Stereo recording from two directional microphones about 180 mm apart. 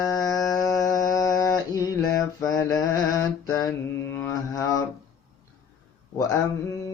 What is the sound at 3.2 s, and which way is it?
Mantra, 20° left (ahead or behind).